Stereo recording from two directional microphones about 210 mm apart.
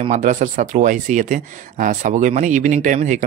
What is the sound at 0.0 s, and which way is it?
Speech, 35° right (ahead or behind).